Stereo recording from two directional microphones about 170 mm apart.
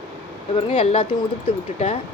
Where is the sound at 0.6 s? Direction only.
35° left (ahead or behind).